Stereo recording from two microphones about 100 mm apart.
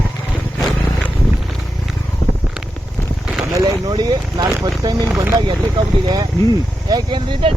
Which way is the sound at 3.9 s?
45° right (ahead or behind).